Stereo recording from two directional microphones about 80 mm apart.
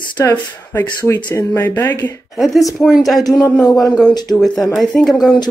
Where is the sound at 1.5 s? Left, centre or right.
Left.